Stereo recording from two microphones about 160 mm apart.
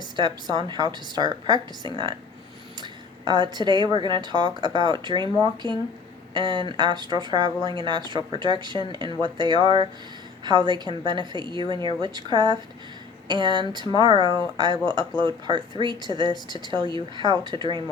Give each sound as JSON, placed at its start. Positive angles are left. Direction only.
{"t": 0.2, "sound": "speech", "side_deg": -25}